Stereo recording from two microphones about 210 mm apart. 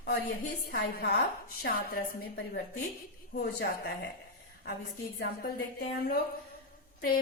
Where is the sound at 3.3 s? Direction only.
50° left (ahead or behind).